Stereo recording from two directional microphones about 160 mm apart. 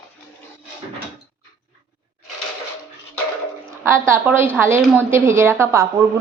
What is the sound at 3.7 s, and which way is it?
A woman's voice, 15° right (ahead or behind).